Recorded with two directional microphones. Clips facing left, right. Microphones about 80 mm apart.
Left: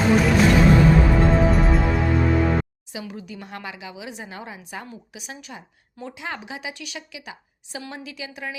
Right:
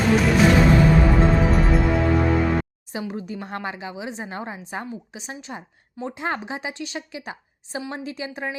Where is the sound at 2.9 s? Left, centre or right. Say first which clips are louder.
Right 5 dB; right.